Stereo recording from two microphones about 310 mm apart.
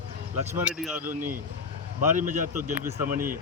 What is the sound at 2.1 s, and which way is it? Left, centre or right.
Speech, right.